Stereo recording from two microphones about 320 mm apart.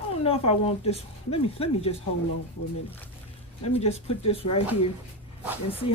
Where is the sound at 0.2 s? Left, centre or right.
Centre.